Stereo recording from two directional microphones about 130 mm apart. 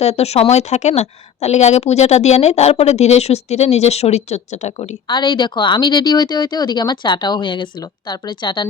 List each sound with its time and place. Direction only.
0.0 s a woman's voice: 55° left (ahead or behind)
5.0 s speech: 35° left (ahead or behind)